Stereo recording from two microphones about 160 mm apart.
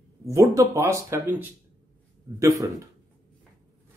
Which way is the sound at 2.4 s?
20° right (ahead or behind).